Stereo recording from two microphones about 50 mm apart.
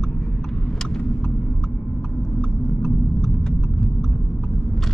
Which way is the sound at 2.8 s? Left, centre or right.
Centre.